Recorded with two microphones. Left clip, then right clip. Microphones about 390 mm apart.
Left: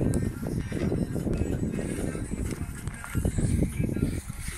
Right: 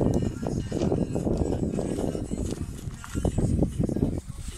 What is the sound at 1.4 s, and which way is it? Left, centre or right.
Music, right.